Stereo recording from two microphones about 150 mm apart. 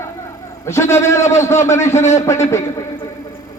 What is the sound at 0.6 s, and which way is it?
A man's voice, 20° left (ahead or behind).